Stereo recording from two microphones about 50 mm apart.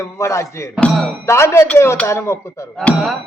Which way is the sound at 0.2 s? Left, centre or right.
Left.